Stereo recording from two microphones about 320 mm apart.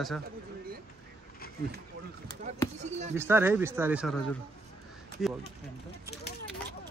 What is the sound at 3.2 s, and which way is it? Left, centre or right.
Speech, centre.